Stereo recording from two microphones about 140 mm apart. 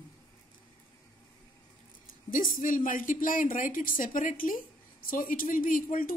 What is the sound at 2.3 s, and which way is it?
A woman's voice, 75° left (ahead or behind).